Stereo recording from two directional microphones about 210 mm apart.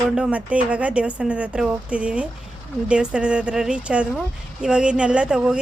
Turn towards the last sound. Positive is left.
turn(degrees=-5)  # may be behind; listen again after turning